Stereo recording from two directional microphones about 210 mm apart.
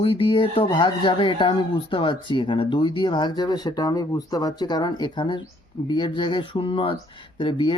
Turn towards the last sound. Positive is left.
turn(degrees=20)  # may be behind; listen again after turning